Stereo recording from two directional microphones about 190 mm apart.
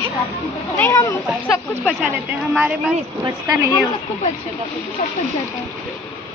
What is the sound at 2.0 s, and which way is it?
Speech, 5° right (ahead or behind).